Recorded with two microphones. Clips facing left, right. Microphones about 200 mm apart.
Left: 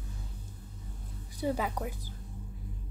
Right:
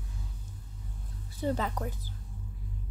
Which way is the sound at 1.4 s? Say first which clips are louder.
Even; 10° left (ahead or behind).